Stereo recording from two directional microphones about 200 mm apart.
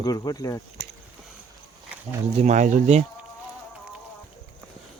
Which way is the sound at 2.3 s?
35° right (ahead or behind).